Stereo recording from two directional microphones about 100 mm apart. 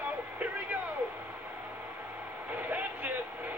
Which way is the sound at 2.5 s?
15° right (ahead or behind).